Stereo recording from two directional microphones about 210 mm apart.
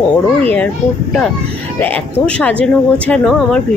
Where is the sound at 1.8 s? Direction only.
5° left (ahead or behind).